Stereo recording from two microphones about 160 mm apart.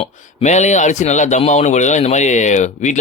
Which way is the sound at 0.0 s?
45° left (ahead or behind).